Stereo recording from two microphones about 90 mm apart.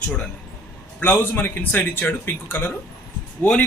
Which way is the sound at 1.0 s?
25° left (ahead or behind).